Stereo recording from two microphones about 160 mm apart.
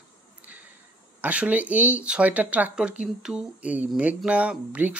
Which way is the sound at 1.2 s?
10° right (ahead or behind).